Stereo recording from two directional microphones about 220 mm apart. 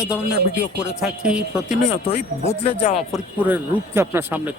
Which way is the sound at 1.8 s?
30° left (ahead or behind).